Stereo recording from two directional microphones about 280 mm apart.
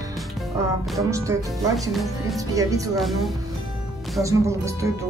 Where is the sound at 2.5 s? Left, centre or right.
Centre.